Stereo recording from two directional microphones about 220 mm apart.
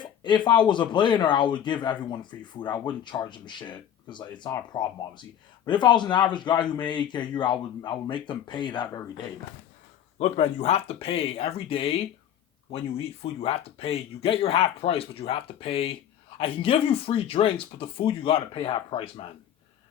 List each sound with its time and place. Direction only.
0.0 s speech: 20° left (ahead or behind)